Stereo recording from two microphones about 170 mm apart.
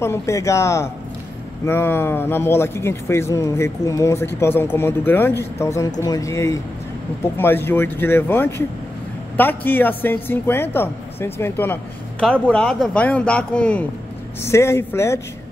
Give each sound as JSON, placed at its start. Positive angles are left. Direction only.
{"t": 0.0, "sound": "a woman's voice", "side_deg": 15}